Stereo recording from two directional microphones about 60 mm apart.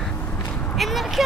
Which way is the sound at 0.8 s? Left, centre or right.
Centre.